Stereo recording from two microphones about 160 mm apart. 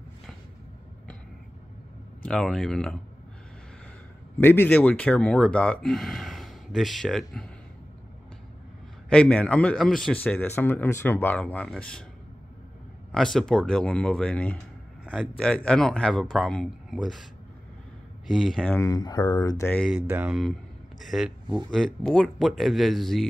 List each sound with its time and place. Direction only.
2.2 s speech: 5° left (ahead or behind)
4.4 s speech: 15° left (ahead or behind)
9.1 s speech: 5° left (ahead or behind)
13.1 s speech: centre (ahead or behind)
18.3 s speech: centre (ahead or behind)
18.7 s speech: 20° left (ahead or behind)
20.1 s speech: 10° right (ahead or behind)